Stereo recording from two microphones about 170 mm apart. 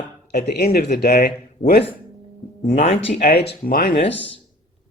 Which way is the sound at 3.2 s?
70° left (ahead or behind).